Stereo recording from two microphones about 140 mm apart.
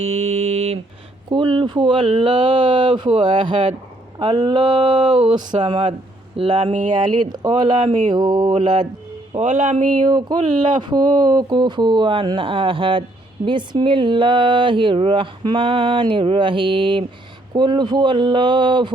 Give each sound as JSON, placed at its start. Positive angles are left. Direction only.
{"t": 0.0, "sound": "mantra", "side_deg": -50}
{"t": 1.3, "sound": "speech", "side_deg": -35}
{"t": 9.3, "sound": "speech", "side_deg": -60}
{"t": 10.1, "sound": "speech", "side_deg": -30}